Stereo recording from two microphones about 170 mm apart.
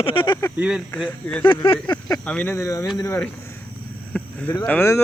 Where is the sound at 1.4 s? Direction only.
30° left (ahead or behind).